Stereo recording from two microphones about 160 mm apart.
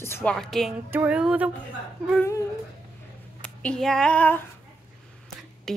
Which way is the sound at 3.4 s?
5° left (ahead or behind).